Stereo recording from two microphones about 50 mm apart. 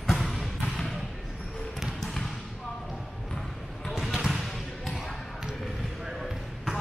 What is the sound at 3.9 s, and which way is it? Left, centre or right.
Basketball bounce, centre.